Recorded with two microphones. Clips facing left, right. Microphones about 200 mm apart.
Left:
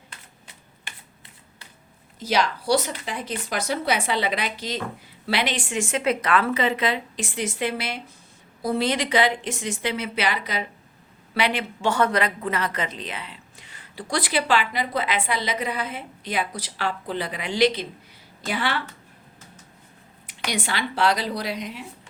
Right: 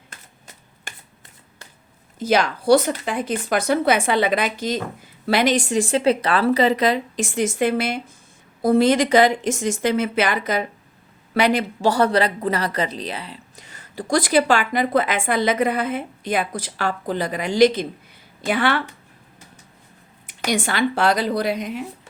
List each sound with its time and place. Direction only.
0.1 s shuffling cards: 45° right (ahead or behind)
2.1 s a woman's voice: 50° right (ahead or behind)
18.4 s a woman's voice: 55° right (ahead or behind)
20.2 s speech: 45° right (ahead or behind)